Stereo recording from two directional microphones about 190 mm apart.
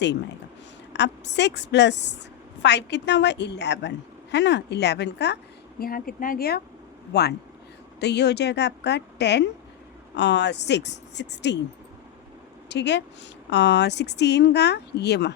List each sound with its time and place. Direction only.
0.9 s a woman's voice: 65° left (ahead or behind)
5.8 s a woman's voice: 50° left (ahead or behind); by 11.6 s 65° left (ahead or behind)
12.6 s a woman's voice: 65° left (ahead or behind)